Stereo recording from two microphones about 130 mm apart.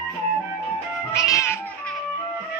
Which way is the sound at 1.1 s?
20° left (ahead or behind).